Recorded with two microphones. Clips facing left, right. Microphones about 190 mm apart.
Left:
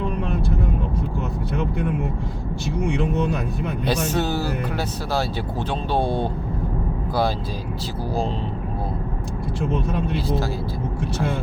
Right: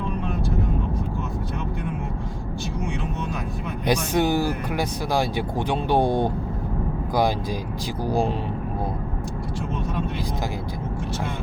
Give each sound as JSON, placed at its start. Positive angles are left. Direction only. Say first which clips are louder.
{"t": 3.8, "sound": "speech", "louder": "right 3 dB", "side_deg": -10}